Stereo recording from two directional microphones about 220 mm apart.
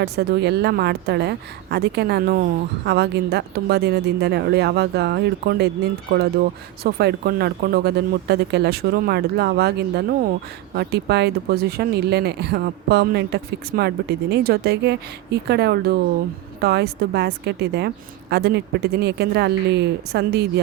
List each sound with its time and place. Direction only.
0.0 s speech: 45° right (ahead or behind)